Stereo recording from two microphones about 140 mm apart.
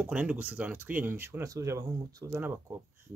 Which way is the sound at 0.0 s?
10° right (ahead or behind).